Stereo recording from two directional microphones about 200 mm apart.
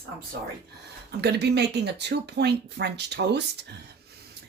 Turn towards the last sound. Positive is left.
turn(degrees=-55)  # may be behind; listen again after turning